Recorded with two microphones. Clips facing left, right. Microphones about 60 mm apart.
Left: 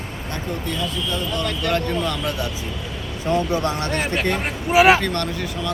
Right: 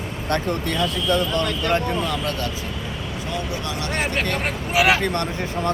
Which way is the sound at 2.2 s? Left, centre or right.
Centre.